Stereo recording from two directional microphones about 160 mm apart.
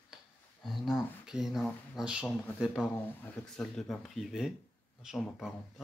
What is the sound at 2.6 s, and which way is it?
Speech, 5° right (ahead or behind).